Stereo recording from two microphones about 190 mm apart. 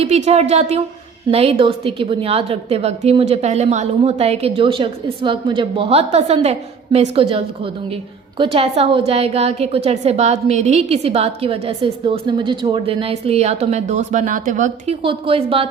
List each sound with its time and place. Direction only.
0.0 s a woman's voice: 35° right (ahead or behind)
15.0 s a woman's voice: 30° right (ahead or behind)